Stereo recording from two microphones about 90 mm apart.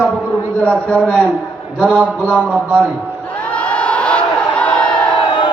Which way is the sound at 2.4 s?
10° right (ahead or behind).